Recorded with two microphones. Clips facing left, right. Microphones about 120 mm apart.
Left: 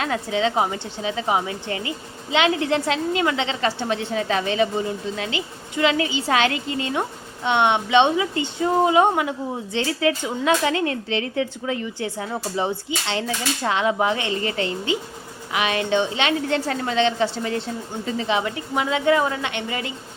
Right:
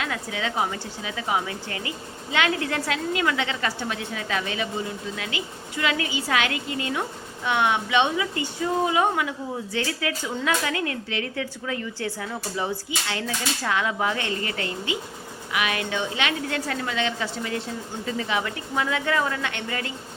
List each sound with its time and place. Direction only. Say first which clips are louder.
0.0 s speech: left 7 dB; 30° left (ahead or behind)